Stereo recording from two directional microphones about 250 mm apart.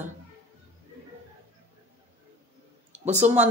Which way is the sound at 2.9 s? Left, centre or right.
Right.